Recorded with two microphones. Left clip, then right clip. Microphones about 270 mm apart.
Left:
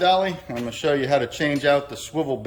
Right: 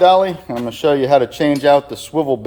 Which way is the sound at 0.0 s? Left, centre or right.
Centre.